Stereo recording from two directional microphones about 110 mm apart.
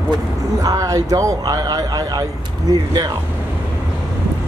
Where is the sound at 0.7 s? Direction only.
30° right (ahead or behind).